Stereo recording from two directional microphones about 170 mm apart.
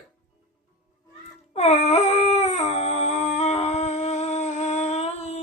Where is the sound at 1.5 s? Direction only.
40° left (ahead or behind).